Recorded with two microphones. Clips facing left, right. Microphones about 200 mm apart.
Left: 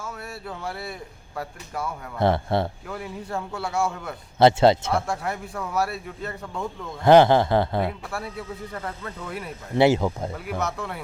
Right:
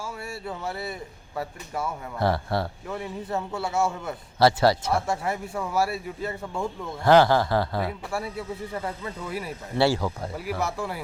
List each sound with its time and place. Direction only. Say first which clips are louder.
0.4 s speech: right 1 dB; centre (ahead or behind)
2.1 s a man's voice: left 4 dB; 20° left (ahead or behind)
2.9 s speech: right 1 dB; centre (ahead or behind)
4.4 s a man's voice: left 4 dB; 20° left (ahead or behind)
4.9 s speech: even; 5° right (ahead or behind)
7.0 s a man's voice: left 3 dB; 20° left (ahead or behind)
7.9 s speech: right 1 dB; centre (ahead or behind)
9.7 s a man's voice: left 4 dB; 20° left (ahead or behind)
10.3 s speech: even; 5° right (ahead or behind)